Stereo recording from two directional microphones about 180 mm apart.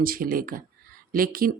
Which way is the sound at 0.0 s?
55° right (ahead or behind).